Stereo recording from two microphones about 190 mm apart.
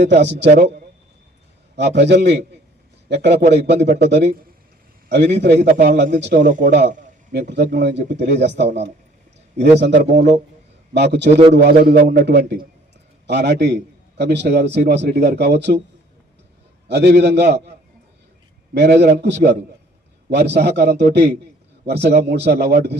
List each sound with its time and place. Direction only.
0.1 s a man's voice: 65° right (ahead or behind)
1.7 s a man's voice: 65° right (ahead or behind)
6.4 s a man's voice: 45° right (ahead or behind)
6.7 s a man's voice: 65° right (ahead or behind)
16.9 s a man's voice: 60° right (ahead or behind)